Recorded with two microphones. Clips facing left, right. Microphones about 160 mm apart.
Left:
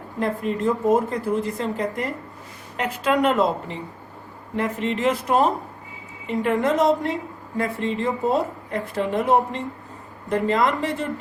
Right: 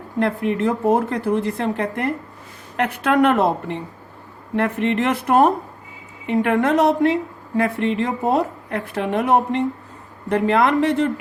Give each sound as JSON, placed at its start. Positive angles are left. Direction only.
{"t": 0.2, "sound": "a woman's voice", "side_deg": -70}